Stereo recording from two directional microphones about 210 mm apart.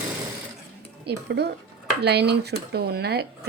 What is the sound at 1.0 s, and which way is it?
Speech, 50° right (ahead or behind).